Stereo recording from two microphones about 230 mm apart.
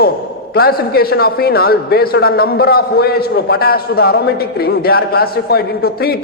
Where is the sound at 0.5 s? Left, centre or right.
Left.